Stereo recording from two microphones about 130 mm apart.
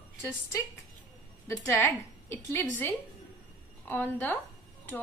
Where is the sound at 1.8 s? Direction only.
20° left (ahead or behind).